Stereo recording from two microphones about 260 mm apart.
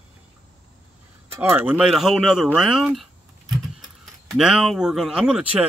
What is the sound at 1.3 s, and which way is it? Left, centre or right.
Speech, centre.